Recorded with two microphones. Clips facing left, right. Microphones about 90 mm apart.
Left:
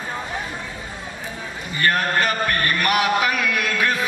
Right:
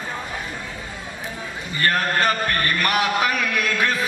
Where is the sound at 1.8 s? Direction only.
35° right (ahead or behind).